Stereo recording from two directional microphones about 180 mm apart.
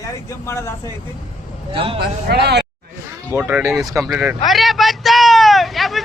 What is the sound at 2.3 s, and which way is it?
Speech, 65° right (ahead or behind).